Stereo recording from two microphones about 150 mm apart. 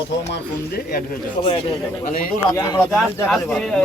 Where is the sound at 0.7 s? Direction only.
80° left.